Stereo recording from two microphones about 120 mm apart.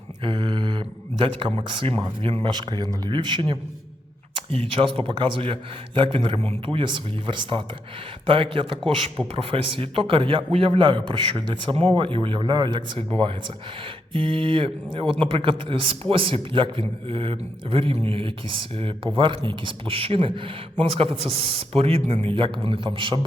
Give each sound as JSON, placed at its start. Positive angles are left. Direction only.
{"t": 0.2, "sound": "a sound", "side_deg": -40}
{"t": 2.2, "sound": "a man's voice", "side_deg": -45}
{"t": 6.7, "sound": "a man's voice", "side_deg": -40}